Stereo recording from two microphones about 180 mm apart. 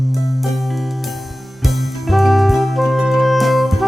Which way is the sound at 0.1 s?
Centre (ahead or behind).